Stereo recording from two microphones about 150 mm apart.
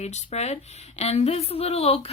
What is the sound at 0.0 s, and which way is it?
A woman's voice, 45° left (ahead or behind).